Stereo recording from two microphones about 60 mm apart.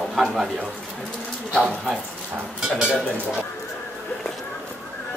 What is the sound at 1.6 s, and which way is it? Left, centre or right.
Speech, centre.